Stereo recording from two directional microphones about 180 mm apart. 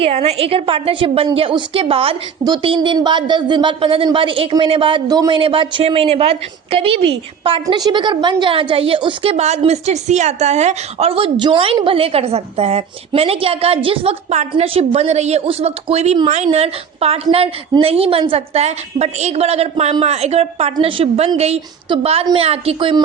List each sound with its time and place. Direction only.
0.0 s speech: 35° right (ahead or behind)